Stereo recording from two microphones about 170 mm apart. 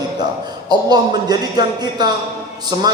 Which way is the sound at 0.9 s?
25° right (ahead or behind).